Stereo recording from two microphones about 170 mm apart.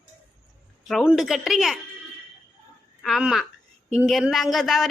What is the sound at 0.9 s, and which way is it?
Speech, centre (ahead or behind).